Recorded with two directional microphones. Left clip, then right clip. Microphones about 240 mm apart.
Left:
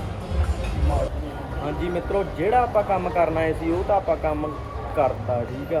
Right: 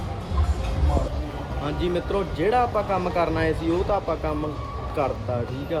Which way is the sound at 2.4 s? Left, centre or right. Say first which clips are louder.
Left 2 dB; centre.